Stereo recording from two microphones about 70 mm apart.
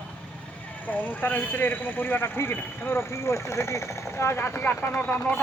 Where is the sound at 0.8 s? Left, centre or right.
Left.